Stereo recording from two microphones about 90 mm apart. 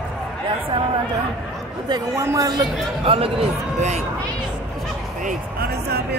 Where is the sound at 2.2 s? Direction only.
35° right (ahead or behind).